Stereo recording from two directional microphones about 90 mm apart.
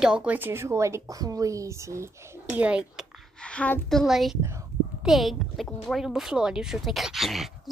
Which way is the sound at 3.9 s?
Centre (ahead or behind).